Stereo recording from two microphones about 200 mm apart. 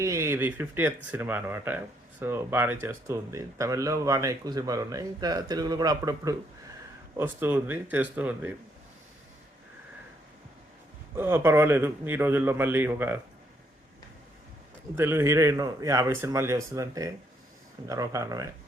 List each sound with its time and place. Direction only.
0.0 s speech: 15° right (ahead or behind)
11.1 s speech: 10° right (ahead or behind)
14.9 s speech: 10° right (ahead or behind)